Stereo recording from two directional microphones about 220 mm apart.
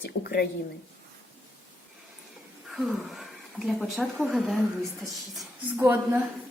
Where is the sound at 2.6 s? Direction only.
Centre (ahead or behind).